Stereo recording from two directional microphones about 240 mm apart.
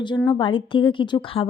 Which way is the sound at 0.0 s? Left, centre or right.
Centre.